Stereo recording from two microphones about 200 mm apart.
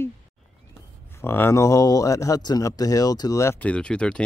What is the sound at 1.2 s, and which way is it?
Speech, 10° left (ahead or behind).